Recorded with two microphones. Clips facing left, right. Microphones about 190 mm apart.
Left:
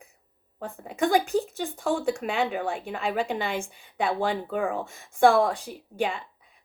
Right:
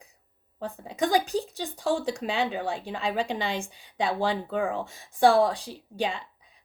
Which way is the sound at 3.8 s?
30° right (ahead or behind).